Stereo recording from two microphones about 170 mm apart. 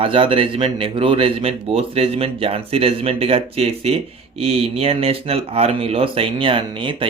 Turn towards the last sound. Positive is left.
turn(degrees=-30)  # may be behind; listen again after turning